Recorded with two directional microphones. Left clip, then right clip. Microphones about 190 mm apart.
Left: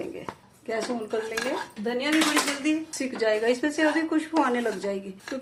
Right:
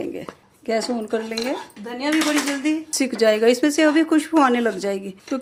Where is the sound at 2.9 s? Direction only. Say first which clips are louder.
Right 11 dB; 55° right (ahead or behind).